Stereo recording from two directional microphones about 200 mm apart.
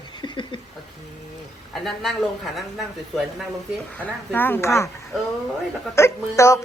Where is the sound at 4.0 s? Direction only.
10° left (ahead or behind).